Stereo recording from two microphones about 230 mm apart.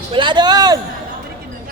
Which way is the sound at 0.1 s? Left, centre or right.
Right.